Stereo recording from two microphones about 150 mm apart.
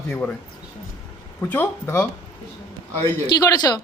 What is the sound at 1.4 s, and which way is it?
Speech, 15° left (ahead or behind).